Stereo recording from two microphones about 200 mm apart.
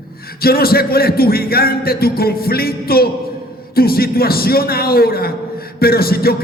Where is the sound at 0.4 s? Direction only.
50° left (ahead or behind).